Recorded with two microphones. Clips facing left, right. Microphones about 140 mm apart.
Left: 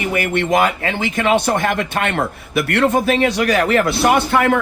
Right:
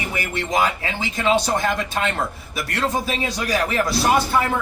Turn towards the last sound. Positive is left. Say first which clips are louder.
# left 4 dB
turn(degrees=75)  # may be behind; listen again after turning